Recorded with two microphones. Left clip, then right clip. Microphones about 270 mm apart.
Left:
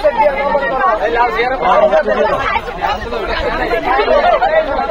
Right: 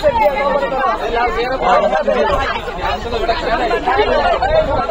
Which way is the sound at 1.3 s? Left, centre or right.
Centre.